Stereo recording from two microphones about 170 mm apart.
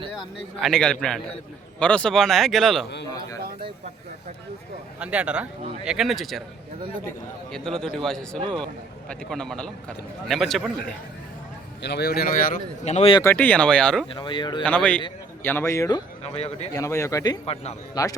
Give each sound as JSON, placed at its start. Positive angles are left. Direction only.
{"t": 0.6, "sound": "speech", "side_deg": 5}
{"t": 4.9, "sound": "speech", "side_deg": -5}
{"t": 7.5, "sound": "speech", "side_deg": 5}
{"t": 11.8, "sound": "speech", "side_deg": 75}
{"t": 12.8, "sound": "speech", "side_deg": 40}
{"t": 13.2, "sound": "speech", "side_deg": 10}
{"t": 14.2, "sound": "speech", "side_deg": 25}
{"t": 14.6, "sound": "speech", "side_deg": 5}
{"t": 16.3, "sound": "speech", "side_deg": 40}
{"t": 16.7, "sound": "speech", "side_deg": 20}
{"t": 17.4, "sound": "speech", "side_deg": 35}
{"t": 18.0, "sound": "speech", "side_deg": 20}